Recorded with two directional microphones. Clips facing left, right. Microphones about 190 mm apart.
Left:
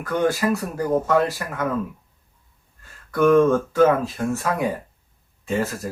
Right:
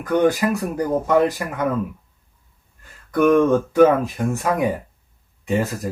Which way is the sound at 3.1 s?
15° right (ahead or behind).